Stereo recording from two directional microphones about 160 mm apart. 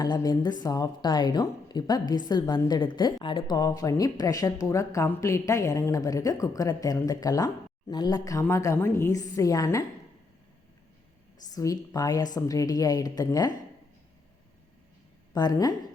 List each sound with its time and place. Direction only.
0.0 s a woman's voice: 25° left (ahead or behind)
11.5 s a woman's voice: 20° left (ahead or behind)
15.3 s speech: 25° left (ahead or behind)